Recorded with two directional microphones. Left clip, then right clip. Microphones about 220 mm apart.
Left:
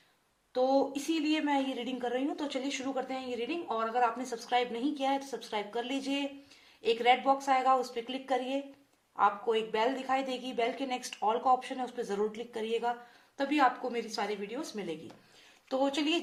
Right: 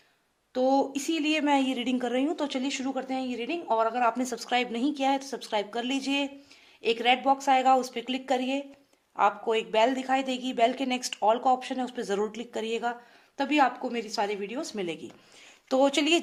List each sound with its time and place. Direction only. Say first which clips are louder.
0.5 s a woman's voice: right 3 dB; 40° right (ahead or behind)